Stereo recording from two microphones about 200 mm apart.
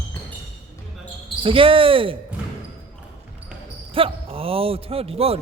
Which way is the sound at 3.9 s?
25° right (ahead or behind).